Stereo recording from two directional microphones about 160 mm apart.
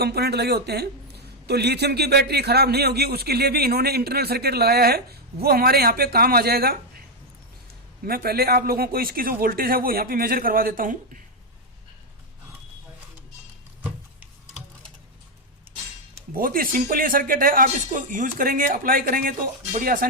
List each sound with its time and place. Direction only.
0.0 s a man's voice: 80° right
8.0 s speech: 70° right (ahead or behind)
16.3 s speech: 65° right (ahead or behind)